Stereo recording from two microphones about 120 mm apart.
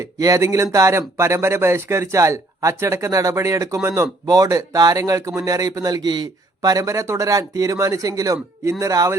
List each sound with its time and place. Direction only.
0.0 s speech: 25° right (ahead or behind)